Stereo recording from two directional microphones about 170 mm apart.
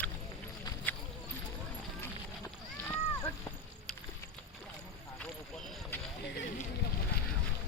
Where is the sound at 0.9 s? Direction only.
10° left (ahead or behind).